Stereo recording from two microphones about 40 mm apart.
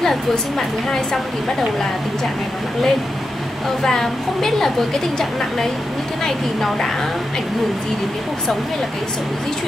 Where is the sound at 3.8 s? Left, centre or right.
Centre.